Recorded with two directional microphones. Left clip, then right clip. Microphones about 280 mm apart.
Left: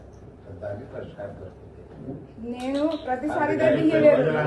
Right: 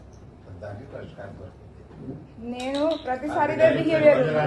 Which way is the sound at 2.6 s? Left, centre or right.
Right.